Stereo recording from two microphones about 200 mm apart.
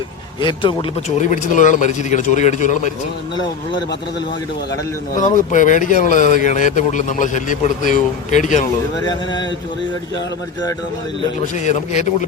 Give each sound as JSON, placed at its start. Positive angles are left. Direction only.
{"t": 0.4, "sound": "a man's voice", "side_deg": 25}
{"t": 1.2, "sound": "a man's voice", "side_deg": 40}
{"t": 5.5, "sound": "a man's voice", "side_deg": 40}
{"t": 11.6, "sound": "a man's voice", "side_deg": 35}